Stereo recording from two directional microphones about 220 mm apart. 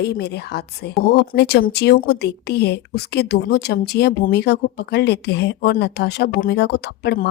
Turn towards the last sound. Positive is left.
turn(degrees=50)  # may be behind; listen again after turning